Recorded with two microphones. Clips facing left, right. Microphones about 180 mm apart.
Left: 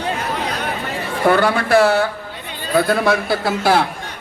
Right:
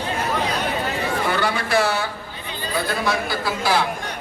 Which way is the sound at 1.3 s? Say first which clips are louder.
Left 10 dB; 55° left (ahead or behind).